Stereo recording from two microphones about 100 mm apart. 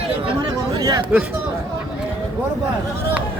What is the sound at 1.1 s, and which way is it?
Speech, 15° right (ahead or behind).